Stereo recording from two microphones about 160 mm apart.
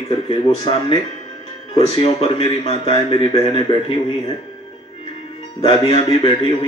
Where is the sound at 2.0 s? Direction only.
35° left (ahead or behind).